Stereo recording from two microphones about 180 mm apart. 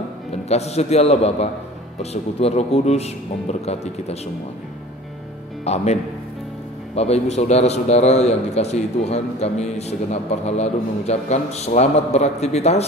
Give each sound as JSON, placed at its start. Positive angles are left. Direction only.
{"t": 0.5, "sound": "a man's voice", "side_deg": 35}
{"t": 5.7, "sound": "a man's voice", "side_deg": 35}
{"t": 7.0, "sound": "a man's voice", "side_deg": 35}